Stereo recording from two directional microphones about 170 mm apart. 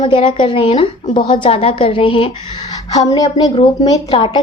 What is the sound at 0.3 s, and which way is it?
A woman's voice, 30° left (ahead or behind).